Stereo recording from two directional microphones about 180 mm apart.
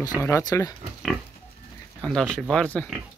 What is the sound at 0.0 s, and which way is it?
Speech, 20° left (ahead or behind).